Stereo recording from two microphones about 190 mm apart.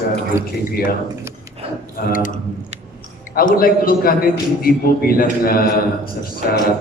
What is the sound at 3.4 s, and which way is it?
A man's voice, 50° left (ahead or behind).